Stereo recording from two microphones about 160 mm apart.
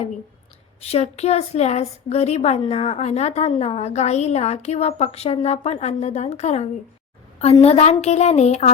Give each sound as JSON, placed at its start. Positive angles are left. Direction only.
{"t": 0.8, "sound": "a woman's voice", "side_deg": 40}